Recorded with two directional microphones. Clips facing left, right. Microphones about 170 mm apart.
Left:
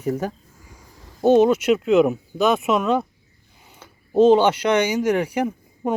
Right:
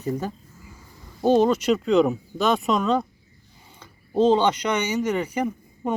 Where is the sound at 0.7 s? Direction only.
15° left (ahead or behind).